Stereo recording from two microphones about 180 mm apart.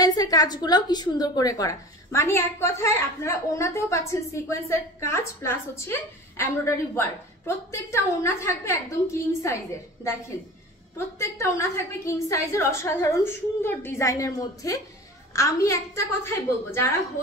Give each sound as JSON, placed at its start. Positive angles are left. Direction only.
{"t": 0.0, "sound": "a woman's voice", "side_deg": 20}
{"t": 11.1, "sound": "a woman's voice", "side_deg": 15}